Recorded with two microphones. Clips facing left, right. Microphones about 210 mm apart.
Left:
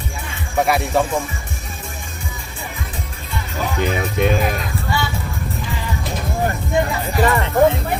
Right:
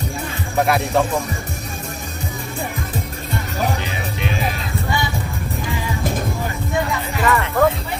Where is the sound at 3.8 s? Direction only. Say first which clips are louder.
Left 7 dB; 50° left (ahead or behind).